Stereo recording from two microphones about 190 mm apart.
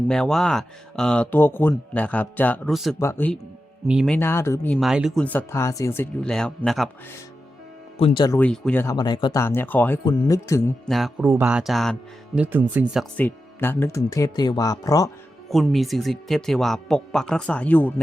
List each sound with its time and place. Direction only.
0.1 s speech: centre (ahead or behind)
3.0 s speech: 10° left (ahead or behind)
3.8 s speech: centre (ahead or behind)
4.8 s speech: centre (ahead or behind)
7.9 s speech: 30° left (ahead or behind)
8.4 s speech: 5° left (ahead or behind); by 9.4 s 25° left (ahead or behind)
9.4 s speech: 10° left (ahead or behind)
10.0 s speech: 20° left (ahead or behind)
10.8 s speech: centre (ahead or behind)
13.1 s speech: 10° left (ahead or behind)
15.4 s speech: centre (ahead or behind)